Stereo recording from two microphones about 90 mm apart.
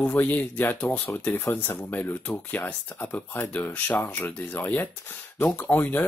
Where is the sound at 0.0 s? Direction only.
20° left (ahead or behind).